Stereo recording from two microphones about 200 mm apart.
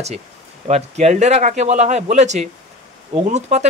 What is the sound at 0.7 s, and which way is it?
Speech, 35° right (ahead or behind).